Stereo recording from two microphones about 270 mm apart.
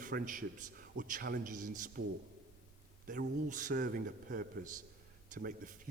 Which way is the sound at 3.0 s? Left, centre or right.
Right.